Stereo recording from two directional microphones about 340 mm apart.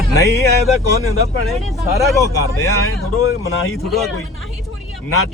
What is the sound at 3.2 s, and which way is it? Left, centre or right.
Speech, left.